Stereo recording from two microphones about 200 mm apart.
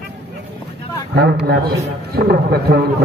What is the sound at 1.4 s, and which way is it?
A man's voice, 50° right (ahead or behind).